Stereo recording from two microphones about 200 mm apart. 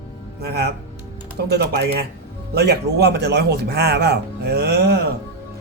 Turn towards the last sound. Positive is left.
turn(degrees=-50)  # may be behind; listen again after turning